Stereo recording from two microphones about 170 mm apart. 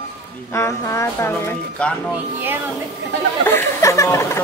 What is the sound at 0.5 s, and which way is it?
Speech, 15° left (ahead or behind).